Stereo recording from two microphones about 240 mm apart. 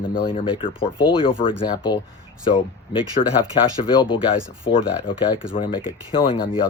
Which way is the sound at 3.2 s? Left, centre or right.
Left.